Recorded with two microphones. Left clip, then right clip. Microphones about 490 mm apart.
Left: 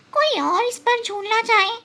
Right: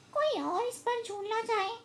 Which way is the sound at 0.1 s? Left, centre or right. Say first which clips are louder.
Left 12 dB; centre.